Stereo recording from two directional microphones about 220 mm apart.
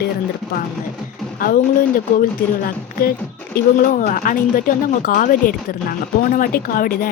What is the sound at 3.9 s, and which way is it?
A woman's voice, 40° left (ahead or behind).